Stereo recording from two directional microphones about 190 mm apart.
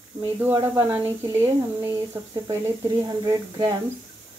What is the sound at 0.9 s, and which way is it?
Speech, 10° right (ahead or behind).